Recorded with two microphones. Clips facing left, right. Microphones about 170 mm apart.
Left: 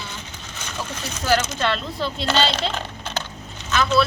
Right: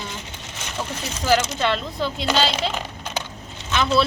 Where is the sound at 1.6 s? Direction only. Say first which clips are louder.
Right 1 dB; 15° right (ahead or behind).